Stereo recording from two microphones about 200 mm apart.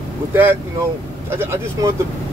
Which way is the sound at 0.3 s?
10° right (ahead or behind).